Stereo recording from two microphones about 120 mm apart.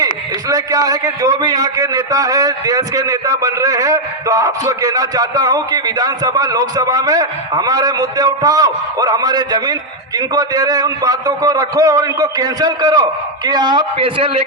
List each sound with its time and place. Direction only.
0.0 s a man's voice: 30° right (ahead or behind); by 14.3 s 45° right (ahead or behind)